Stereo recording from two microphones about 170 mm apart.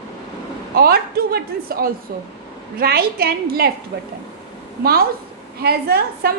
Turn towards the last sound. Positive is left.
turn(degrees=-65)  # may be behind; listen again after turning